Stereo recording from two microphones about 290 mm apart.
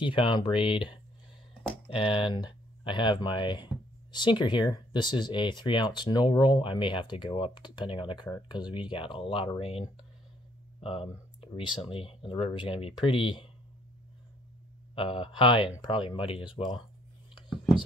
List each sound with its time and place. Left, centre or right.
0.0 s speech: centre
1.5 s a sound: centre
1.9 s speech: centre
15.0 s speech: centre